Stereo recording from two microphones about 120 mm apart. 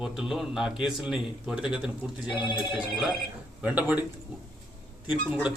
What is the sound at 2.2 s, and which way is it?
Speech, 40° left (ahead or behind).